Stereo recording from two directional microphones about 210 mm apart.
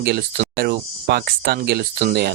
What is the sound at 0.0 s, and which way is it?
Speech, 50° right (ahead or behind).